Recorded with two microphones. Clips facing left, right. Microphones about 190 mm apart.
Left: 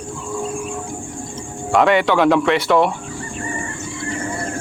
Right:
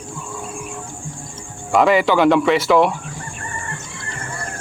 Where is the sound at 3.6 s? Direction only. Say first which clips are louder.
Left 6 dB; 55° right (ahead or behind).